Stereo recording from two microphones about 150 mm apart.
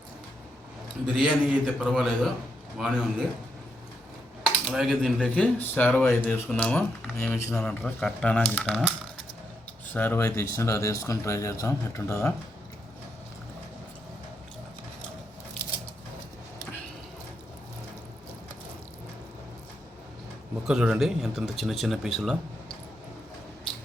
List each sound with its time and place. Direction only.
1.0 s speech: 5° right (ahead or behind)
4.7 s speech: centre (ahead or behind)
9.9 s speech: 15° left (ahead or behind)
20.7 s speech: 5° right (ahead or behind)